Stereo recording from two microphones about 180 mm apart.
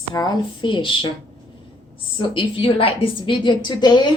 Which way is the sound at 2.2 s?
30° left (ahead or behind).